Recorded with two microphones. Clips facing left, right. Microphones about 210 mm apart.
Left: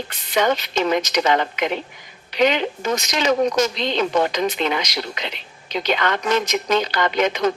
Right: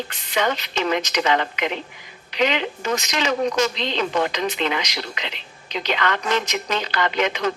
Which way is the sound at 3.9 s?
40° left (ahead or behind).